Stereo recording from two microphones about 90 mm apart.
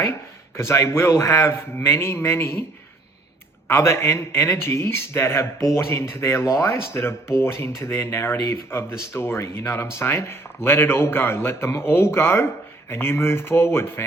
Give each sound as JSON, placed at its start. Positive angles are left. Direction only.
{"t": 0.5, "sound": "a man's voice", "side_deg": 30}
{"t": 3.7, "sound": "speech", "side_deg": 30}